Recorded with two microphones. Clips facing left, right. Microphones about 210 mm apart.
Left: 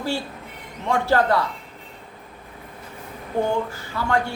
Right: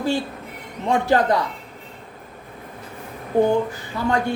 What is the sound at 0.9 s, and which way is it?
Speech, 15° right (ahead or behind).